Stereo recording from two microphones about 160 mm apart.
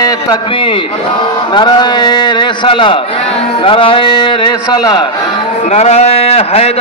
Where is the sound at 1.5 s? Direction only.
25° left (ahead or behind).